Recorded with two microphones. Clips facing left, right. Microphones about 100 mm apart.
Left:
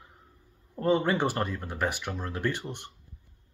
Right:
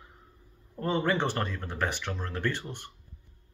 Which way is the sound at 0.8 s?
15° left (ahead or behind).